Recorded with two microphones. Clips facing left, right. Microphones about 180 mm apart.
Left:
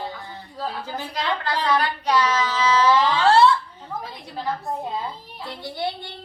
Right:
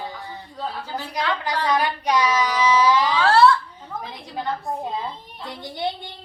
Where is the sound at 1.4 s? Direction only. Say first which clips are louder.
Even; 15° right (ahead or behind).